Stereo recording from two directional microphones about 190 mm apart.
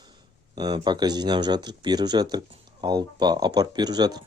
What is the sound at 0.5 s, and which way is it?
Speech, 20° right (ahead or behind).